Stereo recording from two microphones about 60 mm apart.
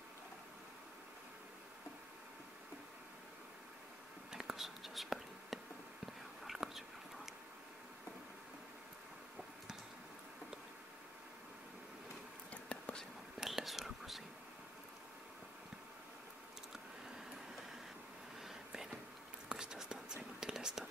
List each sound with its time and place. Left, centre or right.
4.3 s whispering: centre
6.0 s chewing: centre
12.4 s whispering: centre
13.4 s whispering: centre
19.5 s whispering: centre